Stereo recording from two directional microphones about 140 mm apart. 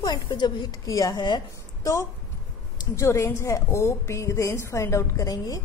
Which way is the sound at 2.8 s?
20° left (ahead or behind).